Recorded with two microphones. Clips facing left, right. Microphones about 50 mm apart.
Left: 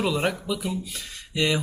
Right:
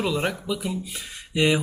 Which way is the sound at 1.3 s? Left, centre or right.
Centre.